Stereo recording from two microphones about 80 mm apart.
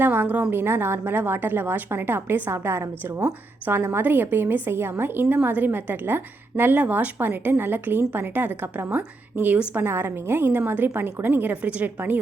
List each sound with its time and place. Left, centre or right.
0.0 s a woman's voice: right
3.8 s a woman's voice: right